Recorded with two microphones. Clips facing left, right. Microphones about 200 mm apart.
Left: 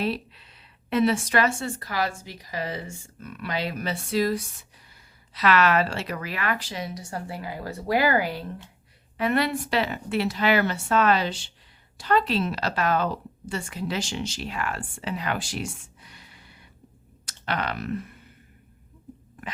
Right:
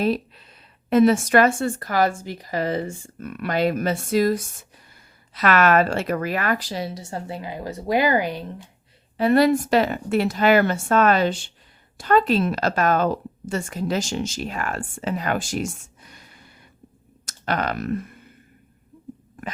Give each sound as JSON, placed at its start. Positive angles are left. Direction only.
{"t": 0.0, "sound": "a woman's voice", "side_deg": -45}
{"t": 9.1, "sound": "a woman's voice", "side_deg": -35}